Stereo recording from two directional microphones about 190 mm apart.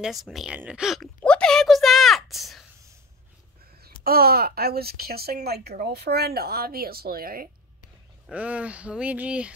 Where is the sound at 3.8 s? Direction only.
50° right (ahead or behind).